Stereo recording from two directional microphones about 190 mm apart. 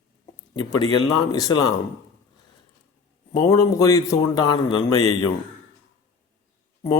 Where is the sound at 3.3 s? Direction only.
15° left (ahead or behind).